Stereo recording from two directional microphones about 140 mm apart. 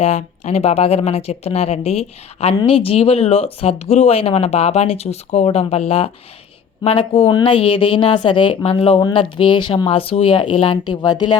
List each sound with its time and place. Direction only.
0.0 s speech: 50° left (ahead or behind)
9.0 s speech: 30° left (ahead or behind)